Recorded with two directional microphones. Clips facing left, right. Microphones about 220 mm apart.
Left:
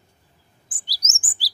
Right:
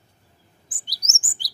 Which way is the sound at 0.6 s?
Centre (ahead or behind).